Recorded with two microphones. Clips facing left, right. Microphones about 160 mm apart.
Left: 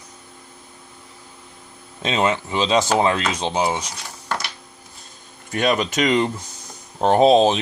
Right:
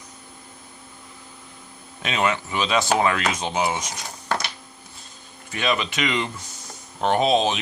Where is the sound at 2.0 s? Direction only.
30° left (ahead or behind).